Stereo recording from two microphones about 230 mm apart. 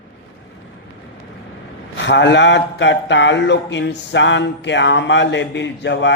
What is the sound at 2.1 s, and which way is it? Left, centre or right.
Speech, left.